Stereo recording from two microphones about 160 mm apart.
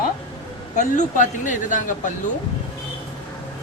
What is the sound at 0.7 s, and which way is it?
Speech, 50° left (ahead or behind).